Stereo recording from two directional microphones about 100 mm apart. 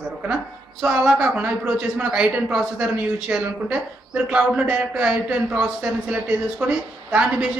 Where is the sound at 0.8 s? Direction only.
10° right (ahead or behind).